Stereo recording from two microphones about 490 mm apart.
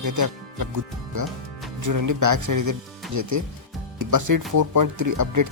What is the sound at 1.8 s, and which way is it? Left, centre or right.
Speech, right.